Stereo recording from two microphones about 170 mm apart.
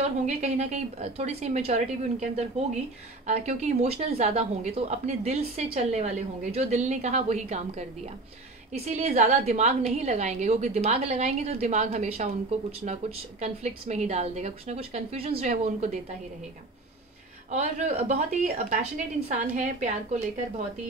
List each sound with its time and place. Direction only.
0.3 s a woman's voice: 40° right (ahead or behind)
8.8 s a woman's voice: 40° right (ahead or behind)
17.5 s speech: 45° right (ahead or behind)